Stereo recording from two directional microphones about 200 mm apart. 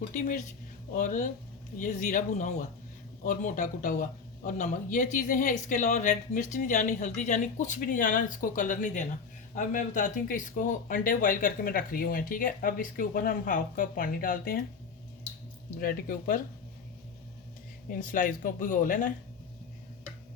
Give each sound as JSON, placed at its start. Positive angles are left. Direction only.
{"t": 0.1, "sound": "speech", "side_deg": 40}
{"t": 15.8, "sound": "speech", "side_deg": 45}
{"t": 17.8, "sound": "speech", "side_deg": 45}